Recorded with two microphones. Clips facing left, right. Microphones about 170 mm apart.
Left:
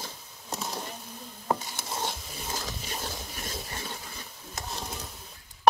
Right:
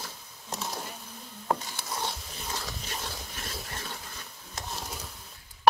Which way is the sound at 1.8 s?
25° left (ahead or behind).